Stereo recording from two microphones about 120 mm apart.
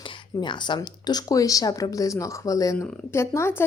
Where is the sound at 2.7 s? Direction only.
20° left (ahead or behind).